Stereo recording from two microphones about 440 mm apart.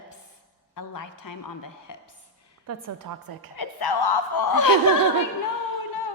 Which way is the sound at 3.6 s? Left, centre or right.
Left.